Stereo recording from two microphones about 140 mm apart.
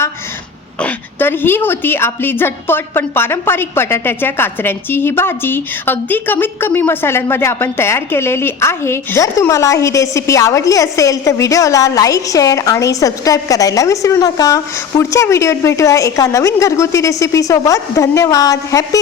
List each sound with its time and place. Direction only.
0.8 s a woman's voice: 10° left (ahead or behind)